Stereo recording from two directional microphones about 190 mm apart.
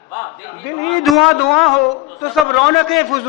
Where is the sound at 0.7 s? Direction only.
20° left (ahead or behind).